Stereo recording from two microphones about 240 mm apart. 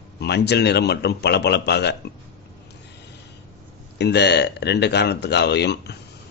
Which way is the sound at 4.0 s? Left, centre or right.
Left.